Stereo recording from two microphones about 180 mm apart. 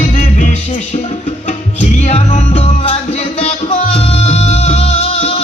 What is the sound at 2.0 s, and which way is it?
Music, 35° left (ahead or behind).